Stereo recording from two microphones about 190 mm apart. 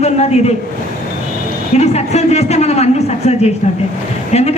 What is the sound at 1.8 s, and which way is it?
Speech, 35° left (ahead or behind).